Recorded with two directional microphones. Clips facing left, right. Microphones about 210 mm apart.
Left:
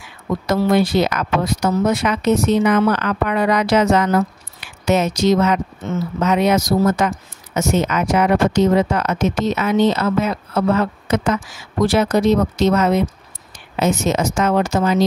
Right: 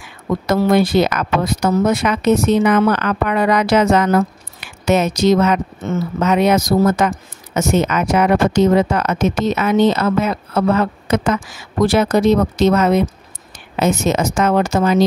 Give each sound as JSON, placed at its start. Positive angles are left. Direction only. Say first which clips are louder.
{"t": 0.5, "sound": "speech", "louder": "right 2 dB", "side_deg": -55}